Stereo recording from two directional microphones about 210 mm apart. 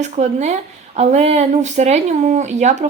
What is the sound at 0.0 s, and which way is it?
Speech, 35° right (ahead or behind).